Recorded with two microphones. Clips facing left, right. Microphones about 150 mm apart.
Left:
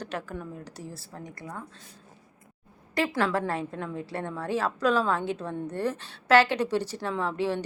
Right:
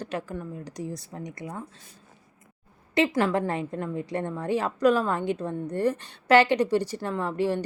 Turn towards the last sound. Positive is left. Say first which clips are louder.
# right 2 dB
turn(degrees=-15)  # may be behind; listen again after turning